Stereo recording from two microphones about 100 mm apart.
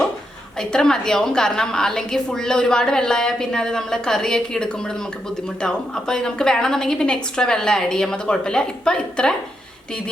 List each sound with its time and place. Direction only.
0.6 s a woman's voice: 5° left (ahead or behind)